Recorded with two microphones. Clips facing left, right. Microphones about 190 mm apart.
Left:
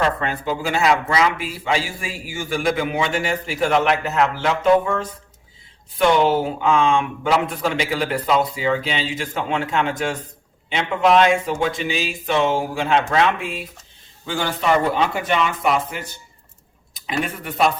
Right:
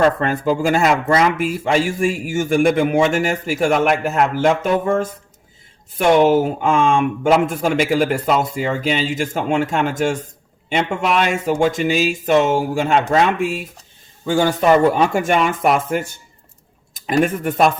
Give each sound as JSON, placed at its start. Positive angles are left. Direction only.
{"t": 0.2, "sound": "speech", "side_deg": -45}
{"t": 6.1, "sound": "speech", "side_deg": -45}
{"t": 11.4, "sound": "speech", "side_deg": -45}